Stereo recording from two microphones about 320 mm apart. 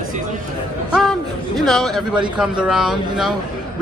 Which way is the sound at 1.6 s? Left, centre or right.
Centre.